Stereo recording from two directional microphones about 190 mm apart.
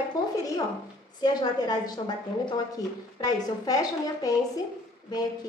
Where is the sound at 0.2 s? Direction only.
20° left (ahead or behind).